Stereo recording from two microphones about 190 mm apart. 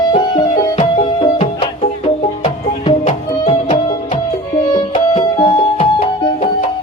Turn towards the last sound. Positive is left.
turn(degrees=30)  # may be behind; listen again after turning